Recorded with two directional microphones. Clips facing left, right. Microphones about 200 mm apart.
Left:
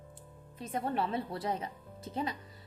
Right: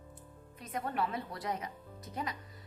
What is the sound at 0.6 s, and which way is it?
A woman's voice, 30° left (ahead or behind).